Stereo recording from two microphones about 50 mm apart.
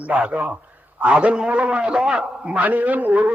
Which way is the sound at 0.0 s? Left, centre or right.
Right.